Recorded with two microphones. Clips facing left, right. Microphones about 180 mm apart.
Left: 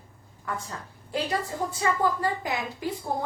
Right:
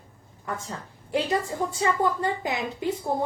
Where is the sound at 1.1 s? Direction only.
25° right (ahead or behind).